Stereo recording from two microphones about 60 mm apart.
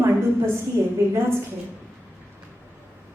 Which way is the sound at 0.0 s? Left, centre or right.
Right.